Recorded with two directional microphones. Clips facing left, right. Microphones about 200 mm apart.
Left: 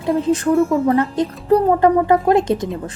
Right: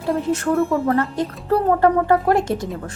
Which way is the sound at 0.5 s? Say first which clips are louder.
Left 3 dB; centre (ahead or behind).